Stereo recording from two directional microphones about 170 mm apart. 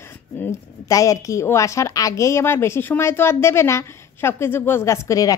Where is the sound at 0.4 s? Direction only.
20° left (ahead or behind).